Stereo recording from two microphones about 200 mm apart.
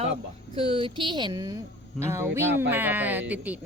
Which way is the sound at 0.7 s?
25° right (ahead or behind).